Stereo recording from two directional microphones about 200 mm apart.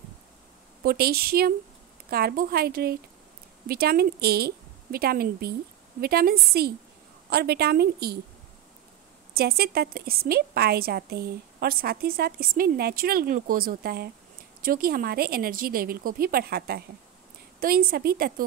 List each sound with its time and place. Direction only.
0.8 s a woman's voice: 50° right (ahead or behind)
9.3 s a woman's voice: 50° right (ahead or behind)